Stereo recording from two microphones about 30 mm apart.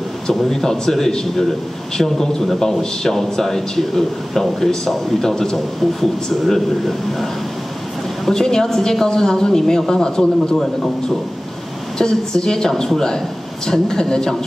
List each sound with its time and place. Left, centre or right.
0.3 s speech: centre
6.4 s speech: centre
8.3 s a man's voice: centre
12.0 s a man's voice: left